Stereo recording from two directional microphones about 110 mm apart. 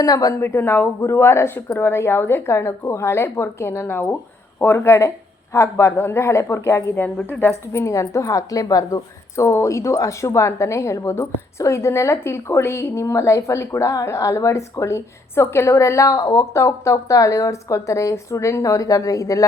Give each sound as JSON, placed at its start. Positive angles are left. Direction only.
{"t": 0.0, "sound": "a woman's voice", "side_deg": 35}
{"t": 0.3, "sound": "a woman's voice", "side_deg": 20}